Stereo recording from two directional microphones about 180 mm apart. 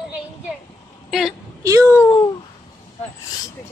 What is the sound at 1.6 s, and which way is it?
Speech, 15° right (ahead or behind).